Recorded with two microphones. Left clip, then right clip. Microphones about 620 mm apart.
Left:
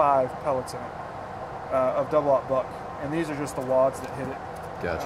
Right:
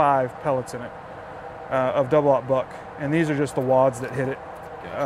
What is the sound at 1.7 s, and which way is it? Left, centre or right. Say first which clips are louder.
Speech: right 3 dB; right.